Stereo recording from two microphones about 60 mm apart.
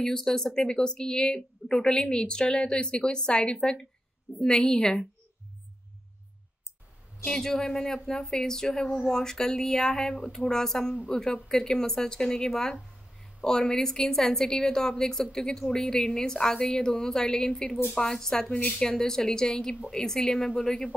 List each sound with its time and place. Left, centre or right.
0.0 s speech: centre
7.2 s speech: centre